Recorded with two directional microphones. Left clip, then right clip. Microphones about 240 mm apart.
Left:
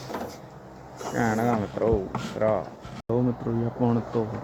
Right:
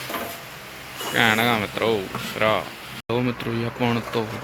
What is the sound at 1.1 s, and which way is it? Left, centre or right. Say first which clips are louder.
Speech: right 6 dB; right.